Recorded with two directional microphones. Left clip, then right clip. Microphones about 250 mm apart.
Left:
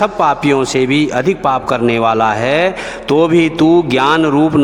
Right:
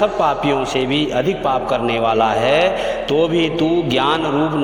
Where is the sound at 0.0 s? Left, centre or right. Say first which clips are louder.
Left 3 dB; left.